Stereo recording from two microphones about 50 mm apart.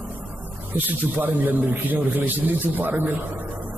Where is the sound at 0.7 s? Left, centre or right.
Right.